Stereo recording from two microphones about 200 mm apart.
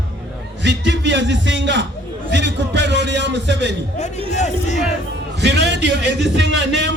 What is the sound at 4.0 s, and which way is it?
Speech, 35° left (ahead or behind).